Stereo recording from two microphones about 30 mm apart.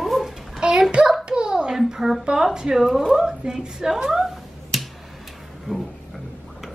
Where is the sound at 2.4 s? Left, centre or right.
Right.